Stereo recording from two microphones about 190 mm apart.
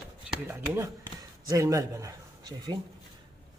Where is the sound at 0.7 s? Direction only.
20° right (ahead or behind).